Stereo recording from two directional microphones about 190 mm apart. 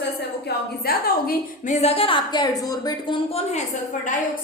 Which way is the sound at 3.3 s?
35° left (ahead or behind).